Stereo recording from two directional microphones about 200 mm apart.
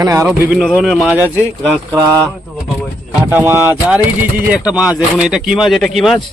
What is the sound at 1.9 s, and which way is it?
Mantra, 20° right (ahead or behind).